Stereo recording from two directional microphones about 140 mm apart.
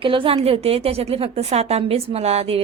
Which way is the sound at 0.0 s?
40° right (ahead or behind).